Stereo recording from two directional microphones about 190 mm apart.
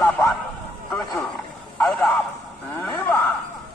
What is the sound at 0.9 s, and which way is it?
Boat, 15° left (ahead or behind).